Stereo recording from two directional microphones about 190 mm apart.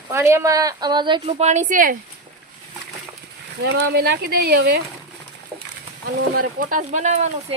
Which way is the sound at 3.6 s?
60° right (ahead or behind).